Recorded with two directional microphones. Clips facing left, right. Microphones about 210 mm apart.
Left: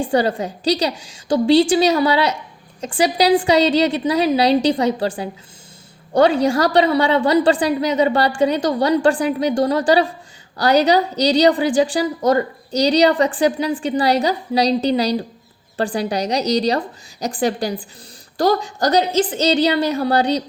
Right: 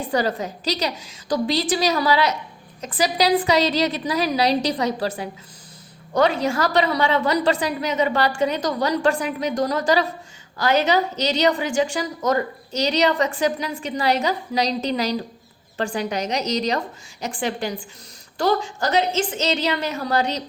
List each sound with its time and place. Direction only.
0.0 s a woman's voice: 30° left (ahead or behind)